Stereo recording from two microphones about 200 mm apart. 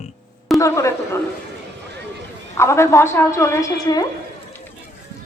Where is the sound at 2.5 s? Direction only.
15° left (ahead or behind).